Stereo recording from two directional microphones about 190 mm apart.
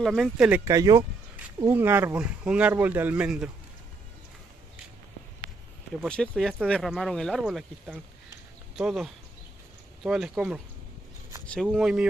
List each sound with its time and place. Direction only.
0.0 s speech: centre (ahead or behind)
0.7 s speech: 15° right (ahead or behind)
6.0 s speech: 5° left (ahead or behind)